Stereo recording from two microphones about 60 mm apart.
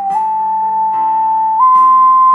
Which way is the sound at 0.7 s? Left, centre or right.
Right.